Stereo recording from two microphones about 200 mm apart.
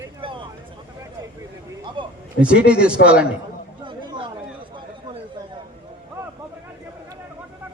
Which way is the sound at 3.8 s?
25° right (ahead or behind).